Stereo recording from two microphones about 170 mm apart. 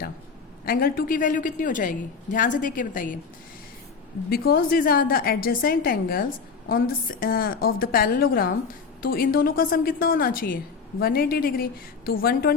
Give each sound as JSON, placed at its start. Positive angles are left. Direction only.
{"t": 0.6, "sound": "a woman's voice", "side_deg": 60}
{"t": 4.3, "sound": "a woman's voice", "side_deg": 60}